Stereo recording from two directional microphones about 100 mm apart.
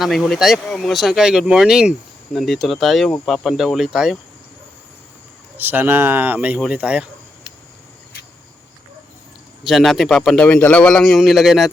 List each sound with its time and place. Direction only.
0.3 s speech: 5° right (ahead or behind)
5.5 s speech: 20° right (ahead or behind)
9.6 s speech: centre (ahead or behind)